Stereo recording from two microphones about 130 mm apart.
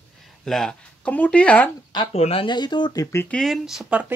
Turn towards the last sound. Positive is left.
turn(degrees=-5)  # may be behind; listen again after turning